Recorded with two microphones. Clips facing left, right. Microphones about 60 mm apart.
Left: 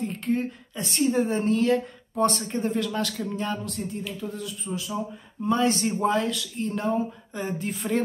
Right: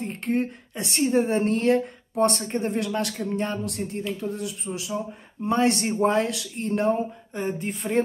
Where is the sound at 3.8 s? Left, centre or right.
Right.